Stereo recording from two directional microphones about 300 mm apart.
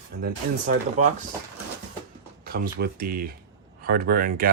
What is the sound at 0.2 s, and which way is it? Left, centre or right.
Speech, right.